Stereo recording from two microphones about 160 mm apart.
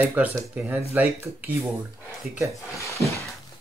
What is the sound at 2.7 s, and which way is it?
Speech, 20° left (ahead or behind).